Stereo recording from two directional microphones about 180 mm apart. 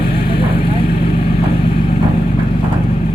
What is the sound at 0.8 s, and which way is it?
Vehicle, 60° left (ahead or behind).